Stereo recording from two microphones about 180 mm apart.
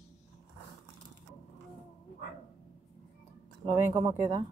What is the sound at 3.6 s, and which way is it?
Speech, 25° right (ahead or behind).